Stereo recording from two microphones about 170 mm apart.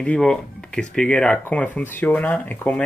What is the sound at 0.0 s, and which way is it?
Speech, 5° left (ahead or behind).